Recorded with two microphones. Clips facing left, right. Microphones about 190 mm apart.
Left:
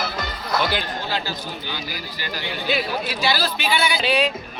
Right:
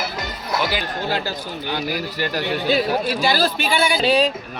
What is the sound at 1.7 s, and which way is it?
A man's voice, 65° right (ahead or behind).